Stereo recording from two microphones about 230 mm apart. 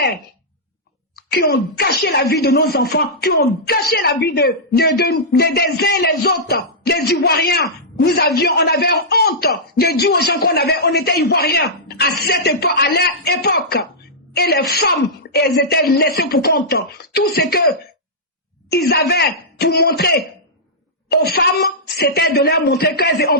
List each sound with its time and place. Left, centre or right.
1.1 s speech: left
18.7 s speech: left